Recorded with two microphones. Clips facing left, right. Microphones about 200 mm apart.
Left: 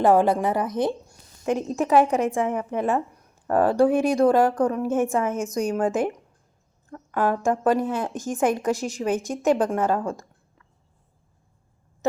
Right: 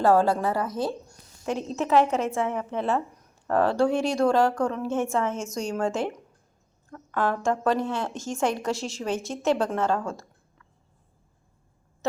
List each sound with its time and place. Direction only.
0.0 s a woman's voice: 20° left (ahead or behind)